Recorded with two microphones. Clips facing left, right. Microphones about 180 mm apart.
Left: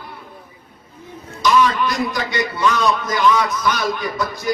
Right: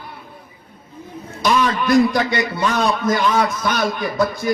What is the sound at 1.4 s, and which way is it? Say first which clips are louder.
A man's voice: left 2 dB; 55° right (ahead or behind).